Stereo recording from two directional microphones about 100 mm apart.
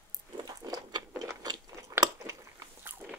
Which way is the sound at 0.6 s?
45° right (ahead or behind).